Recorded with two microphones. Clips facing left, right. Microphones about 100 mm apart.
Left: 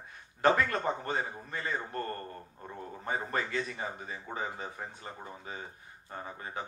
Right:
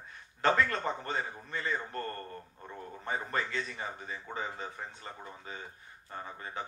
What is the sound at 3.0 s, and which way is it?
A man's voice, 30° left (ahead or behind).